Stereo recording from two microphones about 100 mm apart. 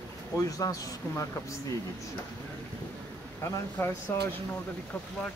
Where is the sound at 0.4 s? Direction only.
35° left (ahead or behind).